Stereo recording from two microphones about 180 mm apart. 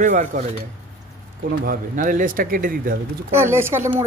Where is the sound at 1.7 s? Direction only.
50° right (ahead or behind).